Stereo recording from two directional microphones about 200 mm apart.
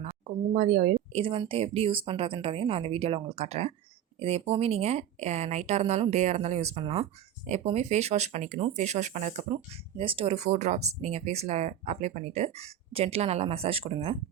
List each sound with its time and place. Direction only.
0.5 s speech: 40° right (ahead or behind)
1.1 s speech: 25° right (ahead or behind)